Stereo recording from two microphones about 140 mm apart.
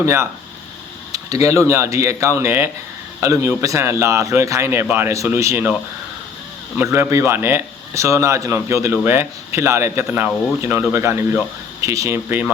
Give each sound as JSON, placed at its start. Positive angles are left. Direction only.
{"t": 0.0, "sound": "speech", "side_deg": -20}
{"t": 6.7, "sound": "a man's voice", "side_deg": -15}